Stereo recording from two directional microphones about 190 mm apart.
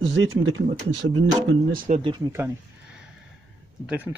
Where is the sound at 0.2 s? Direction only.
90° right.